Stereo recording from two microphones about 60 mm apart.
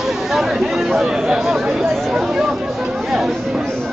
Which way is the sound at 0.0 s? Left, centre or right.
Centre.